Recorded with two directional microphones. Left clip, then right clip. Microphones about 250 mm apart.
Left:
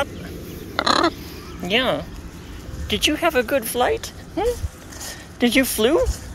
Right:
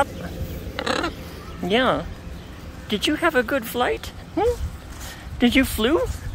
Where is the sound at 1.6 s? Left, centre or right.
Centre.